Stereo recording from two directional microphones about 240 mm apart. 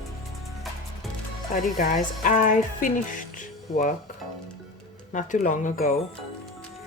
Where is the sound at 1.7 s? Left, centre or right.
Left.